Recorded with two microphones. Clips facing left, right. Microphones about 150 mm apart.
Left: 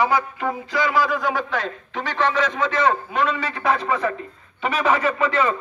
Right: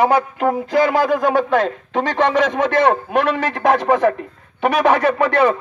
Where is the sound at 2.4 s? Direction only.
70° right (ahead or behind).